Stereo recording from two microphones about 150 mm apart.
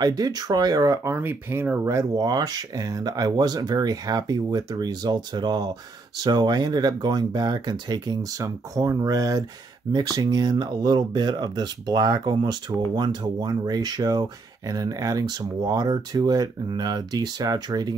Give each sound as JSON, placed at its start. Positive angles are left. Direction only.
{"t": 0.0, "sound": "speech", "side_deg": -25}